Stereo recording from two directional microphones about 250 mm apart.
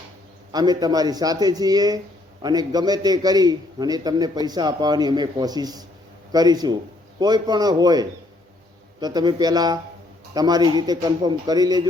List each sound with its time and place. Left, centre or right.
0.5 s a man's voice: centre